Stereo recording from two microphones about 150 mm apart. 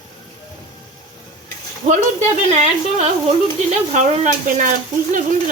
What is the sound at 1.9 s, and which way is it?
Speech, 55° right (ahead or behind).